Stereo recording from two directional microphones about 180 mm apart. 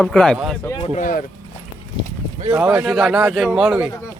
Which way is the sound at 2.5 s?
10° right (ahead or behind).